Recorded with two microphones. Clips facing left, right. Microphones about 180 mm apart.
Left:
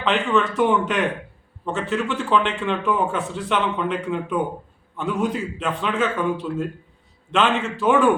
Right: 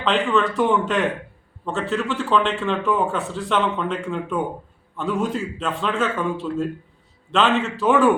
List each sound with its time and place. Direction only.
0.0 s a man's voice: centre (ahead or behind)